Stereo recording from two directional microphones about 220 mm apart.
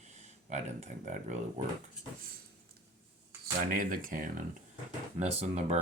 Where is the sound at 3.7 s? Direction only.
40° right (ahead or behind).